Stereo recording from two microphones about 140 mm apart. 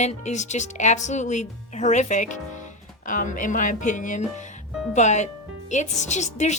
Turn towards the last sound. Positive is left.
turn(degrees=55)  # may be behind; listen again after turning